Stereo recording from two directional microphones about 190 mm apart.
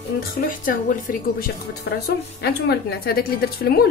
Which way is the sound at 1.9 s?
70° left (ahead or behind).